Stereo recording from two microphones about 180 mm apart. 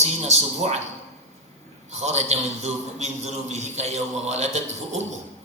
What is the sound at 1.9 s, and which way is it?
A man's voice, 40° right (ahead or behind).